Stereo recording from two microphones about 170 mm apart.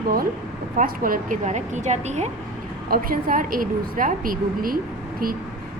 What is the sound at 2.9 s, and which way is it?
A woman's voice, 55° right (ahead or behind).